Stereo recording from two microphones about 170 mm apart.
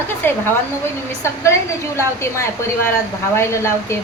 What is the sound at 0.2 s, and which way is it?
A woman's voice, 10° left (ahead or behind).